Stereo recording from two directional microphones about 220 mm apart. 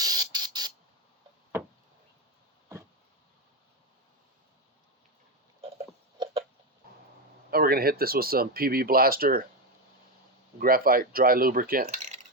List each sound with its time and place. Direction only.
0.0 s spray: 15° right (ahead or behind)
5.7 s chicken: 25° right (ahead or behind)
7.5 s speech: 45° right (ahead or behind)
10.6 s speech: 40° right (ahead or behind)